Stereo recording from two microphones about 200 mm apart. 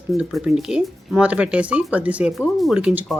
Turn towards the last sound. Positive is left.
turn(degrees=-5)  # may be behind; listen again after turning